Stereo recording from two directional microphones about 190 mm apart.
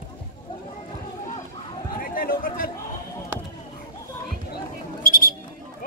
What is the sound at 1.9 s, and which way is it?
Chatter, 50° left (ahead or behind).